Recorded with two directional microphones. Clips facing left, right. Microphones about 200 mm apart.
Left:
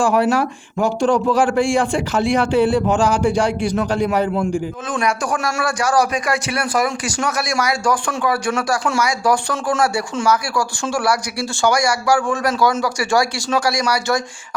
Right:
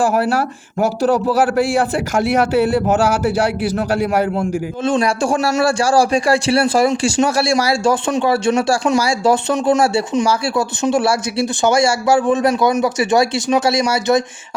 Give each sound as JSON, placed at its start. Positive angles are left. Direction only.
{"t": 0.8, "sound": "a man's voice", "side_deg": -5}
{"t": 4.9, "sound": "a man's voice", "side_deg": -25}